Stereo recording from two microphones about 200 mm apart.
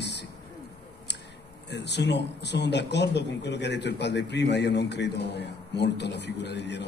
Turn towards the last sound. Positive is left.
turn(degrees=60)  # may be behind; listen again after turning